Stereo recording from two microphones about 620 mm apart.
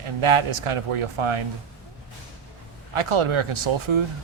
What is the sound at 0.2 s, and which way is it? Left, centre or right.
Speech, right.